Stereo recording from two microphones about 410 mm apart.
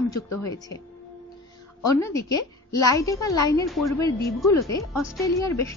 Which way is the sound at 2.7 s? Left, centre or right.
Centre.